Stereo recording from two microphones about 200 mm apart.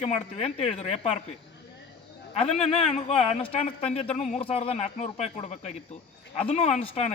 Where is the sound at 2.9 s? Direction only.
30° left (ahead or behind).